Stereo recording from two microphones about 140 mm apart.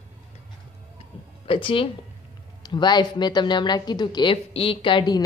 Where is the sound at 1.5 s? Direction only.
40° left (ahead or behind).